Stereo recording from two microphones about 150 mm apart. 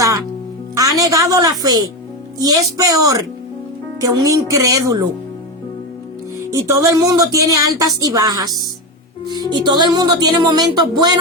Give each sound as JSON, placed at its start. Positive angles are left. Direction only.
{"t": 0.8, "sound": "speech", "side_deg": -25}
{"t": 6.4, "sound": "speech", "side_deg": -20}